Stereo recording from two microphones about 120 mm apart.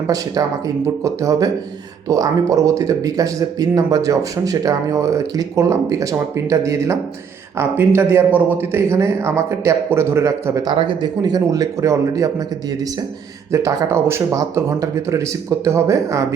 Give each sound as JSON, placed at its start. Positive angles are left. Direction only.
{"t": 0.4, "sound": "speech", "side_deg": -30}
{"t": 10.8, "sound": "speech", "side_deg": -40}
{"t": 13.5, "sound": "speech", "side_deg": -25}